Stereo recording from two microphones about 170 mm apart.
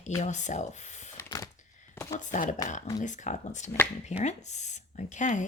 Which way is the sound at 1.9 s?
20° left (ahead or behind).